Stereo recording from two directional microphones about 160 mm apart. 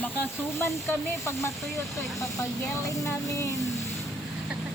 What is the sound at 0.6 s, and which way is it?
Speech, 15° left (ahead or behind).